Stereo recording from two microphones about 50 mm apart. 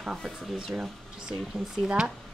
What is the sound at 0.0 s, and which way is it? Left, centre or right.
Speech, centre.